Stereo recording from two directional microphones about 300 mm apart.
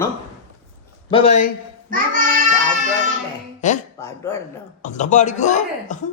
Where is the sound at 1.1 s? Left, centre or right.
Centre.